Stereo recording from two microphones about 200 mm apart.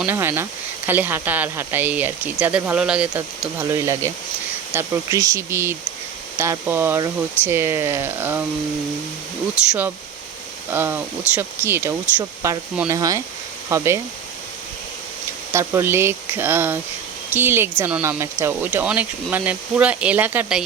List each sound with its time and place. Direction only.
0.0 s speech: 10° right (ahead or behind)
3.6 s speech: 15° right (ahead or behind)
10.7 s speech: 10° right (ahead or behind)
15.5 s speech: 15° right (ahead or behind)